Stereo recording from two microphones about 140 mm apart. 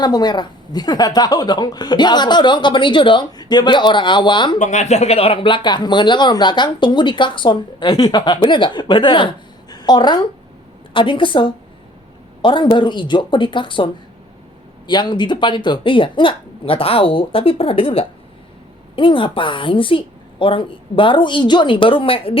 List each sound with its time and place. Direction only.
0.0 s speech: 30° left (ahead or behind)
4.5 s speech: 60° left (ahead or behind); by 22.4 s 40° left (ahead or behind)